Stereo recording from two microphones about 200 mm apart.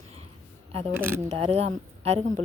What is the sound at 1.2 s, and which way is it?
Speech, 30° right (ahead or behind).